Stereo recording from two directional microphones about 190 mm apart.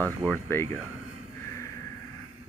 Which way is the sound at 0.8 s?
90° left.